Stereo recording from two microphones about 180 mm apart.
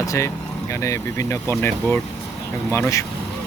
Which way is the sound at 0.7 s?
15° left (ahead or behind).